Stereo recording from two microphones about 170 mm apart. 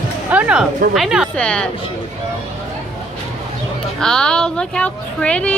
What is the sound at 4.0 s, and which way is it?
Speech, 5° left (ahead or behind).